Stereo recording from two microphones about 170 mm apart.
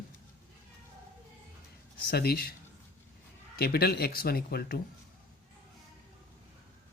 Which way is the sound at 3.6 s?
65° left (ahead or behind).